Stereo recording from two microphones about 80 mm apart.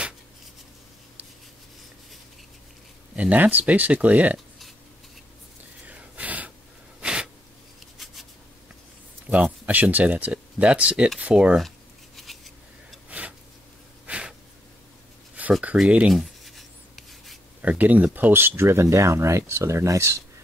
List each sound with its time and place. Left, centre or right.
3.2 s speech: centre
5.9 s gasp: centre
7.0 s a sound: centre
9.3 s speech: centre
12.2 s scissors: centre
14.0 s a sound: centre
15.4 s a sound: centre
16.1 s writing: centre
17.6 s speech: centre; by 20.2 s right